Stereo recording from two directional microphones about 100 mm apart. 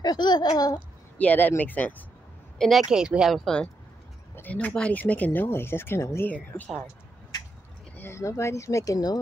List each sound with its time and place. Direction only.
0.0 s speech: 45° left (ahead or behind)
1.1 s speech: 15° left (ahead or behind)
2.6 s speech: 5° right (ahead or behind)
4.4 s speech: 15° left (ahead or behind)
7.9 s speech: 25° left (ahead or behind); by 9.2 s 40° left (ahead or behind)